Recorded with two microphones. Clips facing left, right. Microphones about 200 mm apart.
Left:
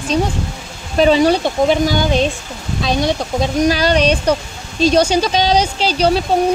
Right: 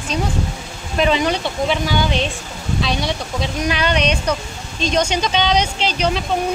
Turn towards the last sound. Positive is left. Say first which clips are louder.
# left 5 dB
turn(degrees=35)  # may be behind; listen again after turning